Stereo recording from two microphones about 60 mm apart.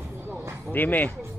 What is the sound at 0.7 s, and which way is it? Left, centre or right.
Speech, left.